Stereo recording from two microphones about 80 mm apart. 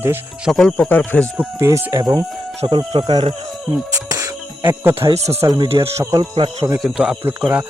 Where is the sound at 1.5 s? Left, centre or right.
Right.